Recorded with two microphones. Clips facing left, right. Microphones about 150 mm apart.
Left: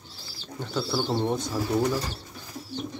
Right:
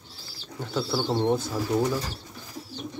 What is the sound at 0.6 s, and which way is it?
Speech, 5° right (ahead or behind).